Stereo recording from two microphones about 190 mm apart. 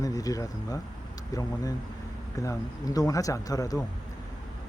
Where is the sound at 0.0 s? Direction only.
20° left (ahead or behind).